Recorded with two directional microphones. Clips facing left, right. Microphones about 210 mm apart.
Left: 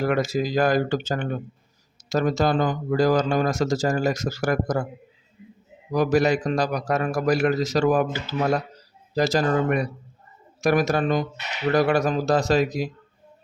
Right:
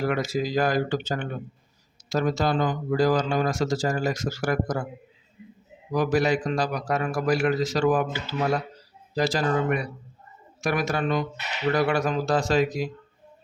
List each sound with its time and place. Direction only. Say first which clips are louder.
0.1 s speech: left 3 dB; 45° left (ahead or behind)
5.9 s a man's voice: left 3 dB; 40° left (ahead or behind)